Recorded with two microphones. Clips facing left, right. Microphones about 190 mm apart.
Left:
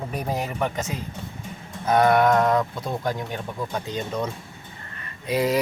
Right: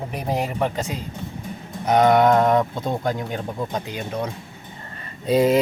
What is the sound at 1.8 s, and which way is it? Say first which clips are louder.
Speech: right 2 dB; 20° right (ahead or behind).